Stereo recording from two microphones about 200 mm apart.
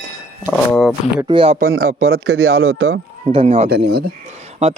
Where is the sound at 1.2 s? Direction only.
25° right (ahead or behind).